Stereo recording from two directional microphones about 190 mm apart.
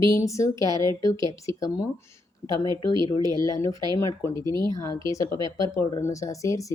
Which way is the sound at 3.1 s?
25° left (ahead or behind).